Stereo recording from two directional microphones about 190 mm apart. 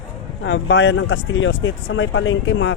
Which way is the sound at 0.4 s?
75° left (ahead or behind).